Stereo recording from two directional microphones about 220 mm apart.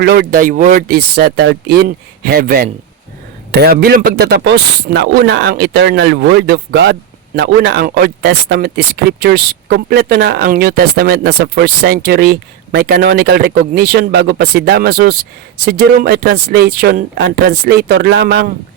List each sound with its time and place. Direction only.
0.0 s speech: 45° right (ahead or behind)